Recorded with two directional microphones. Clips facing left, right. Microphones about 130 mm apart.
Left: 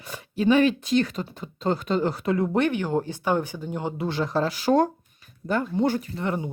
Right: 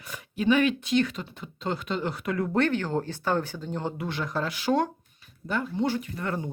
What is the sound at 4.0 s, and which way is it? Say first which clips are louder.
Speech: left 5 dB; 30° left (ahead or behind).